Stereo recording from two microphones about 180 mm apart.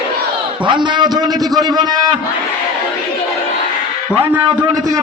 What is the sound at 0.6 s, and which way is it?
A man's voice, 25° right (ahead or behind).